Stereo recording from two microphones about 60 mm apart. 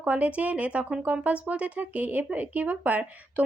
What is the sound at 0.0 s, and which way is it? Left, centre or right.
Speech, right.